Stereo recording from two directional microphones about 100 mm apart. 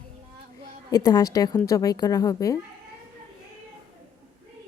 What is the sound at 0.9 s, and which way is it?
A woman's voice, 40° left (ahead or behind).